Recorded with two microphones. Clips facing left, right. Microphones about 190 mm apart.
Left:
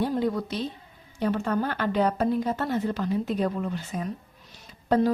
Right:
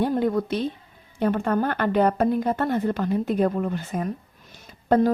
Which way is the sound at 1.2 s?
55° right (ahead or behind).